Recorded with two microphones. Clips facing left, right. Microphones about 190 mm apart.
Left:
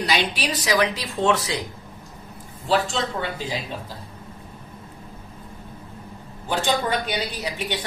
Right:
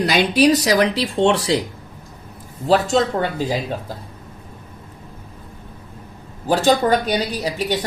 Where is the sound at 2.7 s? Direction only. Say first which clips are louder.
Right 6 dB; 40° right (ahead or behind).